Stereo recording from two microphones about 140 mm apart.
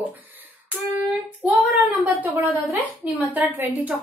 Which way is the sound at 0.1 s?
10° right (ahead or behind).